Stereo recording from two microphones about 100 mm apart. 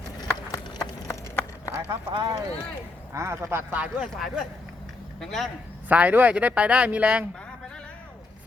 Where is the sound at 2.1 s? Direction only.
50° right (ahead or behind).